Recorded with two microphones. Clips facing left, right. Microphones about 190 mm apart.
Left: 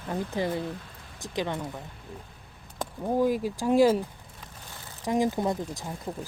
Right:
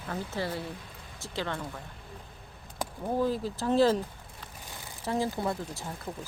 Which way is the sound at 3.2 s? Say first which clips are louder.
Left 4 dB; 15° left (ahead or behind).